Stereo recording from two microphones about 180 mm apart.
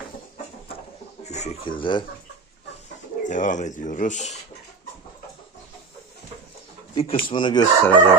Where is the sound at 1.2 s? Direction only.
40° left (ahead or behind).